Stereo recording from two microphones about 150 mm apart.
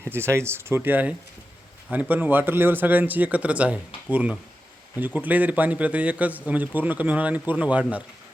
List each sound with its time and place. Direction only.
0.0 s a man's voice: 15° right (ahead or behind)